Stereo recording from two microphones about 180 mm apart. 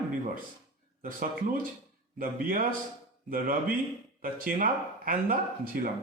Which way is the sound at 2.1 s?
50° right (ahead or behind).